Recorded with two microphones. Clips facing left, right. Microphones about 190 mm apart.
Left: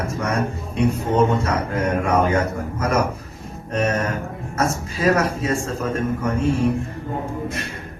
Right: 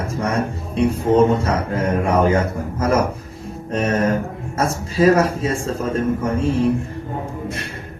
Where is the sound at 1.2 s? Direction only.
30° right (ahead or behind).